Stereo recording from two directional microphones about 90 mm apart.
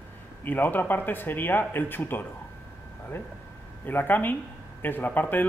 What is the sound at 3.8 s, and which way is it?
Speech, 20° left (ahead or behind).